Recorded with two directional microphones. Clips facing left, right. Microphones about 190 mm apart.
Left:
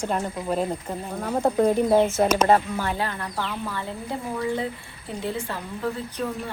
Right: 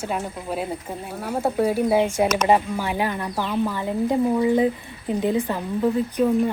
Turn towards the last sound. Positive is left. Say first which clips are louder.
# right 8 dB
turn(degrees=-15)  # may be behind; listen again after turning